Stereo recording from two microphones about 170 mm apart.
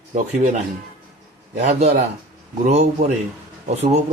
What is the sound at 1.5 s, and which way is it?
Speech, 40° right (ahead or behind).